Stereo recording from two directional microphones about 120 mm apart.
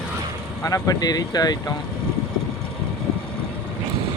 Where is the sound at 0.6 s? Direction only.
30° left (ahead or behind).